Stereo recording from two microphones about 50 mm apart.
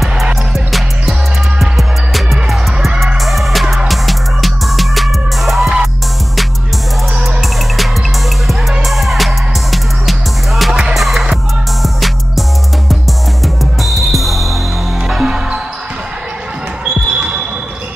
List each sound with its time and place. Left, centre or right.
0.7 s music: centre
7.4 s music: centre
10.7 s music: centre
11.0 s music: centre
16.8 s basketball bounce: centre